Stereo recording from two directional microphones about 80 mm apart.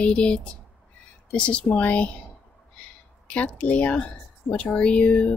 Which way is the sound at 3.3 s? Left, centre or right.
Centre.